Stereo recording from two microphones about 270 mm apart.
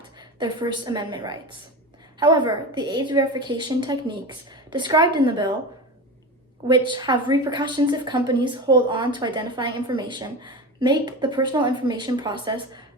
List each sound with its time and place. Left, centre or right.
0.2 s a woman's voice: centre
6.7 s a woman's voice: centre